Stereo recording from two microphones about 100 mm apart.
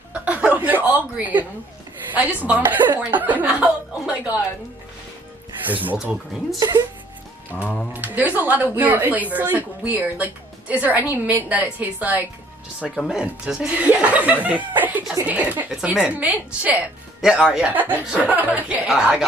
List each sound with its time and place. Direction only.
0.1 s chuckle: 10° right (ahead or behind)
2.1 s speech: 15° right (ahead or behind)
5.7 s speech: 15° right (ahead or behind)
7.5 s a sound: 10° left (ahead or behind)
7.9 s speech: 15° right (ahead or behind)
12.9 s speech: centre (ahead or behind)